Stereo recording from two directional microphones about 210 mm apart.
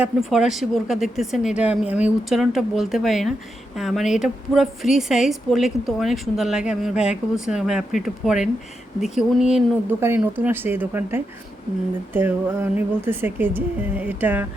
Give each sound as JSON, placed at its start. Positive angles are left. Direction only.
{"t": 0.0, "sound": "a woman's voice", "side_deg": 0}